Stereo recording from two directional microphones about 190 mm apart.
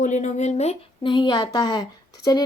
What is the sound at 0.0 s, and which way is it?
Speech, 40° left (ahead or behind).